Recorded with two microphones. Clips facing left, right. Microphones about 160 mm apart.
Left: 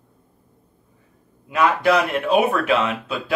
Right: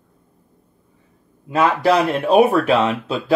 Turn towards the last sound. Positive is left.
turn(degrees=-30)  # may be behind; listen again after turning